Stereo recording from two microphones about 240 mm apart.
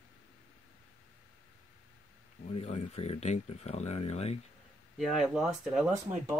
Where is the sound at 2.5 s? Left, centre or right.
Left.